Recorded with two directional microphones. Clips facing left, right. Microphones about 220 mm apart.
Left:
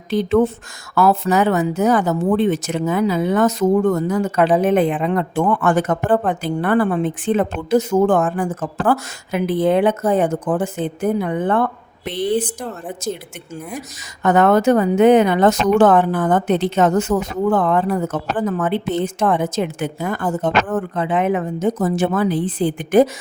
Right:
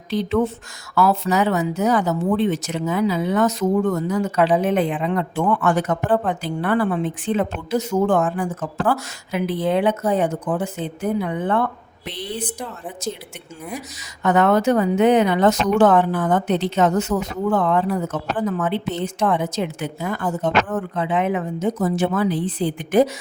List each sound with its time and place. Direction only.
0.1 s speech: 50° left (ahead or behind)
14.2 s speech: 45° left (ahead or behind)